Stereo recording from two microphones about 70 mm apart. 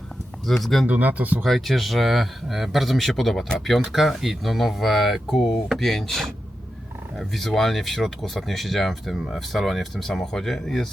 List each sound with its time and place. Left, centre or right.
0.6 s speech: centre
0.9 s speech: right
1.5 s speech: centre